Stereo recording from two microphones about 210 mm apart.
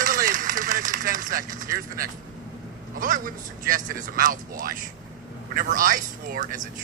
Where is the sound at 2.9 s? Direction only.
40° right (ahead or behind).